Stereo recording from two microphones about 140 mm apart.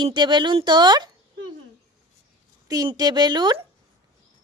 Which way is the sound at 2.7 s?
25° right (ahead or behind).